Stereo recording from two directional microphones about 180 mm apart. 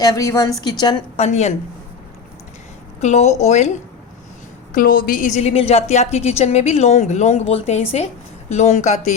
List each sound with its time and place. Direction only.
0.0 s a woman's voice: 20° left (ahead or behind)
1.1 s a woman's voice: 35° left (ahead or behind)
3.0 s a woman's voice: 40° left (ahead or behind)
4.7 s a woman's voice: 55° left (ahead or behind)